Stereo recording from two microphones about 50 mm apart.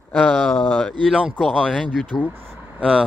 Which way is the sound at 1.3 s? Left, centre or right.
Centre.